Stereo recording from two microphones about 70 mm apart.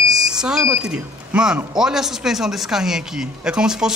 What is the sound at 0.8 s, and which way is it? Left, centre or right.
A man's voice, centre.